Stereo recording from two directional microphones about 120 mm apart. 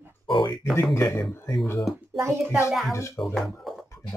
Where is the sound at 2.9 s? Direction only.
25° left (ahead or behind).